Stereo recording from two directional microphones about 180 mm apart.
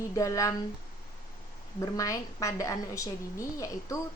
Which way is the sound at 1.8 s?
20° left (ahead or behind).